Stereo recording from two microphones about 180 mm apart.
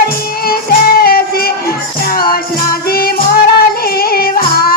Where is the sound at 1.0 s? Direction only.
55° left (ahead or behind).